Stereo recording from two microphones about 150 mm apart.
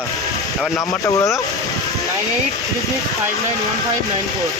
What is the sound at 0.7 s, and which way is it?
Speech, 20° left (ahead or behind).